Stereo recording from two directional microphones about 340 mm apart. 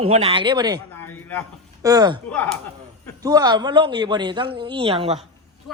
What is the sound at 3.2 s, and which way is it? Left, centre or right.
Speech, centre.